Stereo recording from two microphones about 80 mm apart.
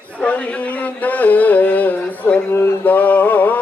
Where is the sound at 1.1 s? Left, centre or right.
Centre.